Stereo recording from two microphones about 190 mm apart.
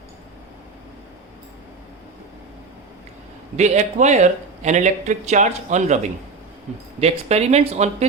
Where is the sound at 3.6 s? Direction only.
35° right (ahead or behind).